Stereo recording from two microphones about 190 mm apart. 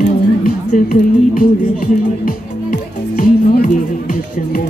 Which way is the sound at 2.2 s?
45° left (ahead or behind).